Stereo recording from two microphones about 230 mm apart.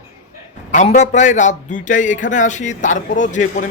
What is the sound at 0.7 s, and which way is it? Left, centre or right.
Speech, left.